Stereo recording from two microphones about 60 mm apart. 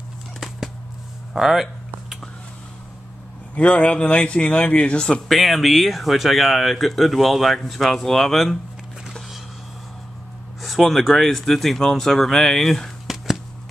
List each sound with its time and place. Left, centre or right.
1.3 s speech: centre
3.5 s a man's voice: left
5.3 s speech: centre
10.6 s speech: centre
13.0 s a sound: centre